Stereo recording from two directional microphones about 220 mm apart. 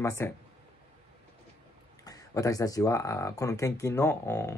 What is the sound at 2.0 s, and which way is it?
Speech, 15° left (ahead or behind).